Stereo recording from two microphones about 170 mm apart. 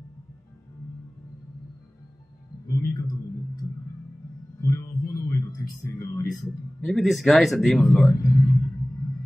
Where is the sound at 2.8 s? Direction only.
20° left (ahead or behind).